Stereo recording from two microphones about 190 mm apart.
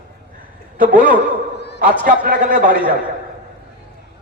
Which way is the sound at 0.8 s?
45° right (ahead or behind).